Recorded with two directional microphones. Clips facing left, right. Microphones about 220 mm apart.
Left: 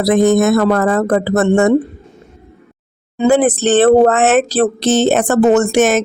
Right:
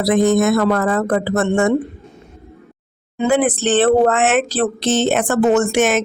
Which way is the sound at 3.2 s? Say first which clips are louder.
Left 4 dB; 40° left (ahead or behind).